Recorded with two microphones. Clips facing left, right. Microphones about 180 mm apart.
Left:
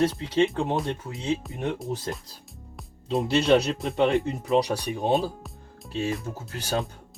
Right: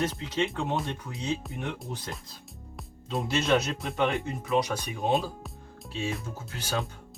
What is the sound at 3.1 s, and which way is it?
Speech, 35° left (ahead or behind).